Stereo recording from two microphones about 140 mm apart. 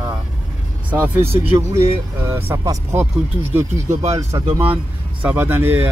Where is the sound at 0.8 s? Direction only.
15° right (ahead or behind).